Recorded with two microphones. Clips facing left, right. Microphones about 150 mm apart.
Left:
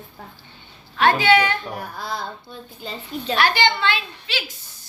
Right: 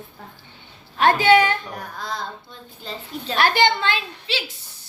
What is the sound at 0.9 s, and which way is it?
Speech, 45° right (ahead or behind).